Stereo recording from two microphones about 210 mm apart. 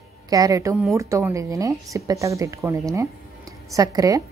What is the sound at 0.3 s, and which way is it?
A woman's voice, 15° right (ahead or behind).